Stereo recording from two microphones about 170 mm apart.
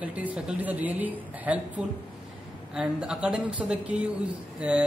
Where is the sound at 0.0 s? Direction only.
10° right (ahead or behind).